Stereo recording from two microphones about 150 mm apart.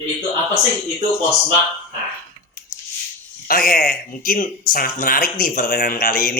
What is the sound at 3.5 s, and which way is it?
Speech, 75° left (ahead or behind).